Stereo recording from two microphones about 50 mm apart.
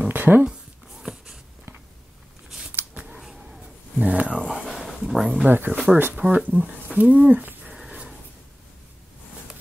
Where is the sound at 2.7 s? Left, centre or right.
Right.